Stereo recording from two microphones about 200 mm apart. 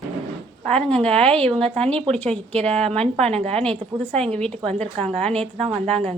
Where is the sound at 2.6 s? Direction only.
30° right (ahead or behind).